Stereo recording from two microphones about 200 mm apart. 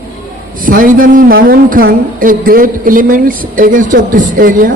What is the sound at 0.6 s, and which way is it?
A man's voice, 45° right (ahead or behind).